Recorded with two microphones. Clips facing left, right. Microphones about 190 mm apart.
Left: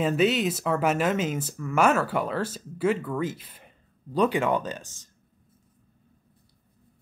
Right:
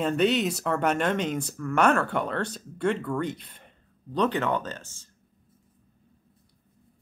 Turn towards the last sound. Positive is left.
turn(degrees=15)  # may be behind; listen again after turning